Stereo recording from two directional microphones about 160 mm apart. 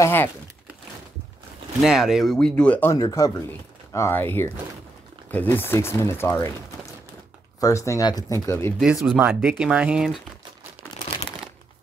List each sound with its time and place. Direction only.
0.0 s speech: 15° left (ahead or behind)
1.8 s speech: centre (ahead or behind)
3.0 s speech: 25° left (ahead or behind)
8.7 s speech: centre (ahead or behind)